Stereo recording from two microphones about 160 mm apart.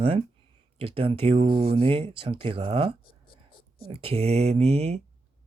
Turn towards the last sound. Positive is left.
turn(degrees=-40)  # may be behind; listen again after turning